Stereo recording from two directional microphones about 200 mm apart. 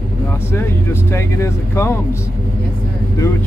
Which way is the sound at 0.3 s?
10° left (ahead or behind).